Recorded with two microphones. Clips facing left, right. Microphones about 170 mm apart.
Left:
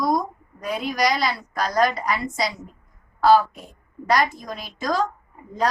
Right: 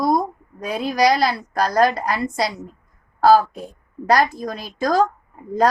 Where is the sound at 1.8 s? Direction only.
30° right (ahead or behind).